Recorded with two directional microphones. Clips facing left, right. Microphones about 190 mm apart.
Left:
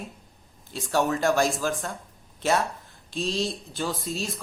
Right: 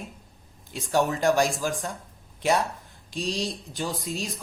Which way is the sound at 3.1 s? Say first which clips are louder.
Left 2 dB; 15° right (ahead or behind).